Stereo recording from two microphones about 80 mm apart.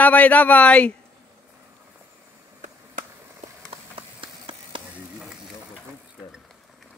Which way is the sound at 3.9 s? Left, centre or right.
Right.